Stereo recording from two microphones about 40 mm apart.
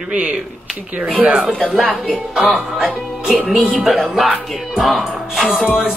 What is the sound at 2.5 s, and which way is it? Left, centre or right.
Speech, centre.